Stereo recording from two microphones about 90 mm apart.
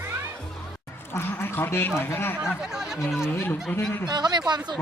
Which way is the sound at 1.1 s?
25° left (ahead or behind).